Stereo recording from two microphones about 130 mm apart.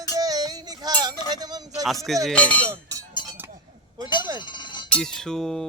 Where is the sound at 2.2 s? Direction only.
10° left (ahead or behind).